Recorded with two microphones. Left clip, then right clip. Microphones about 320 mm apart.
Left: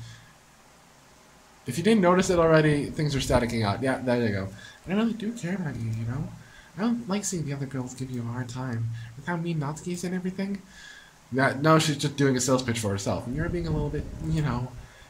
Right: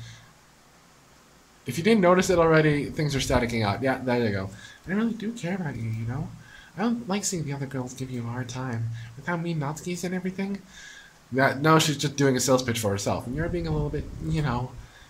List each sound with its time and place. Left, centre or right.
1.7 s speech: centre